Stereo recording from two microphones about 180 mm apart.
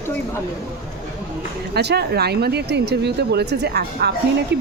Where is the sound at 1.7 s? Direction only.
65° right (ahead or behind).